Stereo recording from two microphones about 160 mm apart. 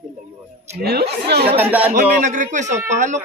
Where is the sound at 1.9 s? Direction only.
50° right (ahead or behind).